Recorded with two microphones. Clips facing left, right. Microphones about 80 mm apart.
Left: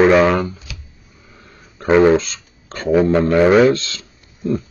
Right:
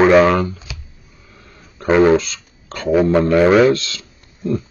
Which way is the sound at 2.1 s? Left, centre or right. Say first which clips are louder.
Right 1 dB; left.